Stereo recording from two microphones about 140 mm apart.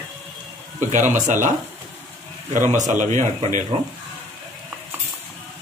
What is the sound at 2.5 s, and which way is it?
Speech, 60° right (ahead or behind).